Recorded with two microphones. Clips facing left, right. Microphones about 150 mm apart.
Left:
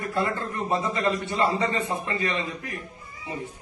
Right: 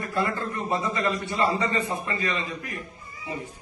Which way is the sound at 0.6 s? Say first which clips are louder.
Left 2 dB; 20° left (ahead or behind).